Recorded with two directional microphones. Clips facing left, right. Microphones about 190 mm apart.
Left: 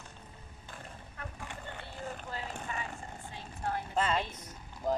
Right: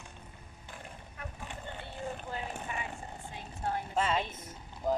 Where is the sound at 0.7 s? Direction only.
15° right (ahead or behind).